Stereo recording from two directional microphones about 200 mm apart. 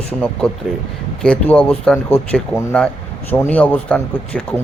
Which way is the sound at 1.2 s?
5° left (ahead or behind).